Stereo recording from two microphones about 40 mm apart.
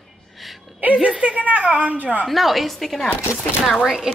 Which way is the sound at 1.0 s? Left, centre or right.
Right.